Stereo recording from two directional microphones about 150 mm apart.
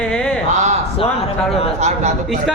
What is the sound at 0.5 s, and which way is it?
Speech, 50° right (ahead or behind).